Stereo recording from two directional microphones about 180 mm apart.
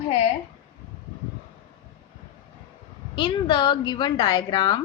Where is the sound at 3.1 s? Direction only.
25° left (ahead or behind).